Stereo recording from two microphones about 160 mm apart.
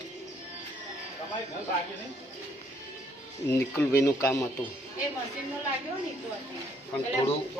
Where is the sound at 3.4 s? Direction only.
15° left (ahead or behind).